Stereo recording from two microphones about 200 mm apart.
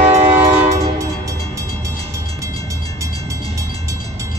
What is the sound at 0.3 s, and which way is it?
Train, 10° right (ahead or behind).